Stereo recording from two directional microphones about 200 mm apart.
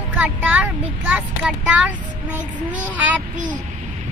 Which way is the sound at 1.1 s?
5° right (ahead or behind).